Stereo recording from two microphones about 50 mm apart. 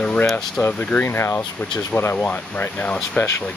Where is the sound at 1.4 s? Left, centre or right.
Left.